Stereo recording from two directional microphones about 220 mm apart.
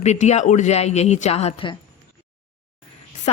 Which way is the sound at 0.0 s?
30° left (ahead or behind).